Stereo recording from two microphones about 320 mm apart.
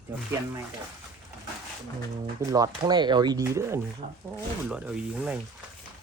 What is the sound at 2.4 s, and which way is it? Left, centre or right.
Speech, centre.